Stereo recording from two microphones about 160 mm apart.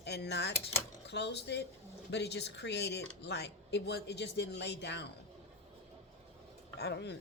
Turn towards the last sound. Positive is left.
turn(degrees=90)